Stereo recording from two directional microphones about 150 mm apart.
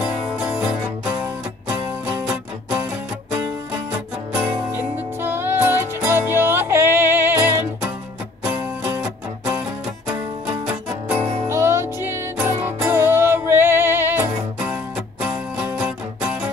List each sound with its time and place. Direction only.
0.0 s music: 5° right (ahead or behind)
2.2 s music: 5° right (ahead or behind)
5.2 s music: 15° right (ahead or behind)
10.7 s music: 5° right (ahead or behind)
11.1 s music: 45° right (ahead or behind)
11.4 s music: 15° right (ahead or behind)